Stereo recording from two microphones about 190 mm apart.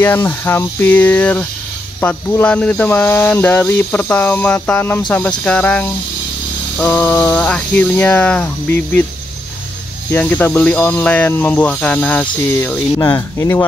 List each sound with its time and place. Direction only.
0.0 s speech: 10° left (ahead or behind)
10.1 s speech: 10° left (ahead or behind)